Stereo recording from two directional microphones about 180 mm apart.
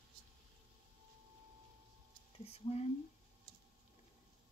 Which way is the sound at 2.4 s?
35° left (ahead or behind).